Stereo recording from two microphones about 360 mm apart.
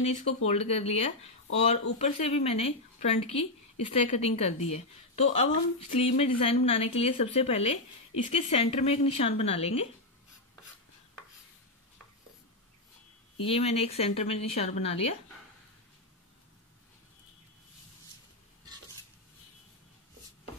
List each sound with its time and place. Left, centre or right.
0.0 s a woman's voice: centre
13.4 s a woman's voice: centre